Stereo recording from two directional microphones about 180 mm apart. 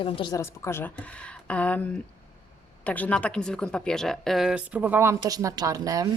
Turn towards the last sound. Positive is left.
turn(degrees=-20)  # may be behind; listen again after turning